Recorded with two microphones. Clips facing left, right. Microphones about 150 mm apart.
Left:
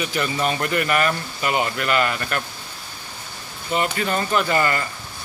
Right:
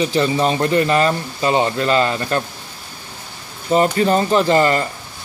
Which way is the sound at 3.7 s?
35° right (ahead or behind).